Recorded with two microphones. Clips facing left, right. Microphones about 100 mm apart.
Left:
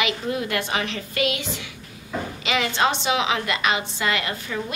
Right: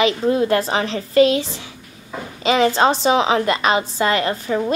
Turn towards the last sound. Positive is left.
turn(degrees=-35)  # may be behind; listen again after turning